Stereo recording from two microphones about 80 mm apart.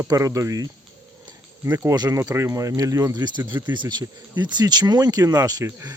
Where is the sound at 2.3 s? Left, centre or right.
Right.